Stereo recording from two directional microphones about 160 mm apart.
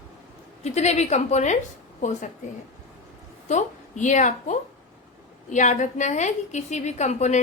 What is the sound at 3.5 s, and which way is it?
A woman's voice, 50° left (ahead or behind).